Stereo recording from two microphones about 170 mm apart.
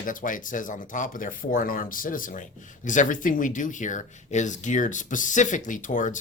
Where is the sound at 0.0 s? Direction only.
50° left (ahead or behind).